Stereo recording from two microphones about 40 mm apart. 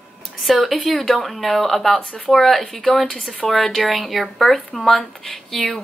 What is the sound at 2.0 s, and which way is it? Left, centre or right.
Speech, left.